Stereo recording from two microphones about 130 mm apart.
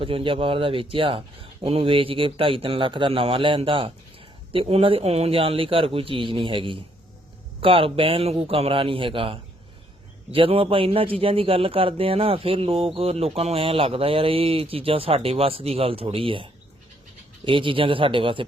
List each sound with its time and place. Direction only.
0.0 s a man's voice: 45° right (ahead or behind)